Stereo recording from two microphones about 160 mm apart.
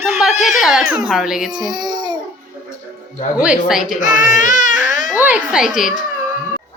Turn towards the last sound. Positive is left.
turn(degrees=-5)  # may be behind; listen again after turning